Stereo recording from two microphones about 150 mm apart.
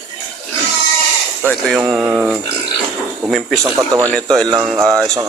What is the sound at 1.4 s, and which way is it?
Speech, 5° left (ahead or behind).